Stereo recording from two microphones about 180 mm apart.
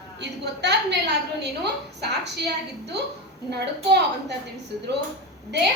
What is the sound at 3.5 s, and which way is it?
Speech, 70° right (ahead or behind).